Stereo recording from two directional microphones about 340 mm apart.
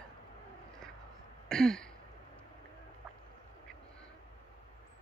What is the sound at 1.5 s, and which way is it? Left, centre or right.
Throat clearing, centre.